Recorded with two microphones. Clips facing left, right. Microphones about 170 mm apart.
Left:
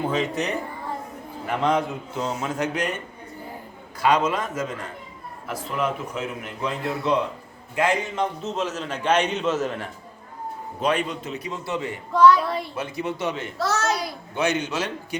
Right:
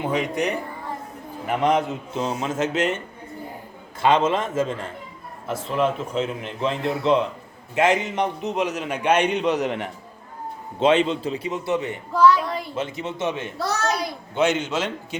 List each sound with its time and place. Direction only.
0.0 s a man's voice: 15° right (ahead or behind)
4.0 s a man's voice: 25° right (ahead or behind)
12.1 s speech: 5° right (ahead or behind)
12.7 s a man's voice: 25° right (ahead or behind)